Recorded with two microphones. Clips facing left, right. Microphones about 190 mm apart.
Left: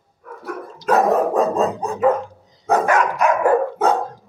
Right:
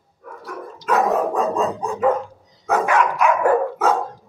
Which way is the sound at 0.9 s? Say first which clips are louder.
Left 3 dB; 40° left (ahead or behind).